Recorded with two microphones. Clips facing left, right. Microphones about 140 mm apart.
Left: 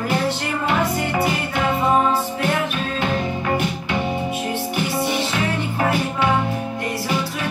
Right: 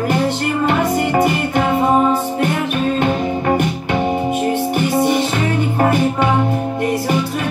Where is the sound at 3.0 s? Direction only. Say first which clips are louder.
Right 5 dB; 50° right (ahead or behind).